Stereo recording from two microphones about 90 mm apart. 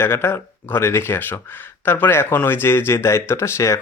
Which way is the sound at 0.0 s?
25° left (ahead or behind).